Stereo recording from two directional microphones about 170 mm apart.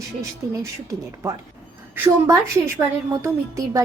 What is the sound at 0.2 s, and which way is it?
A woman's voice, 20° right (ahead or behind).